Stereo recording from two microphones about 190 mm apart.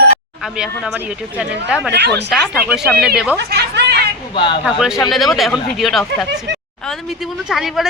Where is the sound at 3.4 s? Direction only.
60° right (ahead or behind).